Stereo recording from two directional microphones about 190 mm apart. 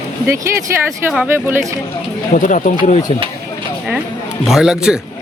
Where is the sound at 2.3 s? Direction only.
45° left (ahead or behind).